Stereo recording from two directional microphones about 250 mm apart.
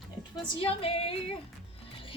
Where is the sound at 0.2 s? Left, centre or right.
Left.